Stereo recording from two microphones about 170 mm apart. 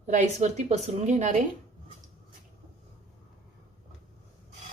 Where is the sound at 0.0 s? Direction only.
45° right (ahead or behind).